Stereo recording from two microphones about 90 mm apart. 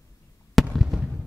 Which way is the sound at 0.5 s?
Centre (ahead or behind).